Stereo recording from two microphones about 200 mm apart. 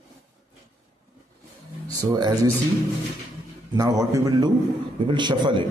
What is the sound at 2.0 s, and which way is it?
Speech, 20° right (ahead or behind).